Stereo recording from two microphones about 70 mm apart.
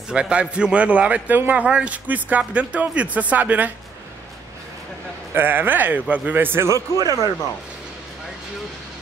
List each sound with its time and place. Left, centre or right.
0.1 s a man's voice: centre
5.3 s a man's voice: right
6.9 s speech: left